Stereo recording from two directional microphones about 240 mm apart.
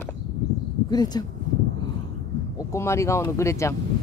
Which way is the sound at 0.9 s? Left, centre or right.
Centre.